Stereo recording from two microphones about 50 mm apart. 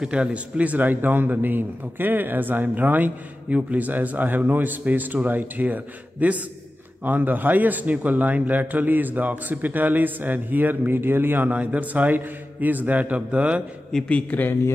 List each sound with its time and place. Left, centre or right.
0.0 s a man's voice: right
11.5 s a man's voice: right
13.9 s a man's voice: centre
14.3 s speech: left